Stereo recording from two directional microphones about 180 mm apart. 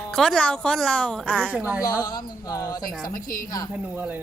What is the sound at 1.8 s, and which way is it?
Speech, 20° left (ahead or behind).